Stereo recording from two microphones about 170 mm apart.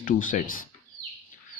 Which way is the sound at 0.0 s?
50° left (ahead or behind).